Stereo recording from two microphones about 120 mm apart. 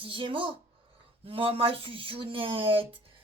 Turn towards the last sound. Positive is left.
turn(degrees=-50)  # may be behind; listen again after turning